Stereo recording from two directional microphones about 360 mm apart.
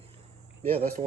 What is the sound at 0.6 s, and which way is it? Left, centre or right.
Speech, centre.